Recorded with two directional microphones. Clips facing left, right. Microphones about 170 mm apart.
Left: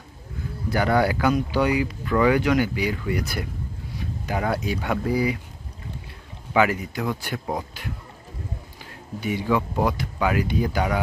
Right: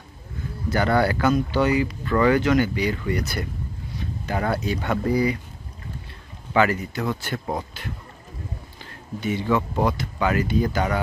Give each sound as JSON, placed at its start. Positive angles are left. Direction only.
{"t": 0.7, "sound": "speech", "side_deg": 10}
{"t": 6.5, "sound": "speech", "side_deg": 10}
{"t": 8.8, "sound": "a sound", "side_deg": 10}
{"t": 9.6, "sound": "speech", "side_deg": 5}